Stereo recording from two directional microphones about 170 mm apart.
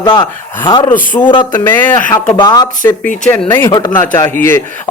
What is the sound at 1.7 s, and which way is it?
Speech, 15° left (ahead or behind).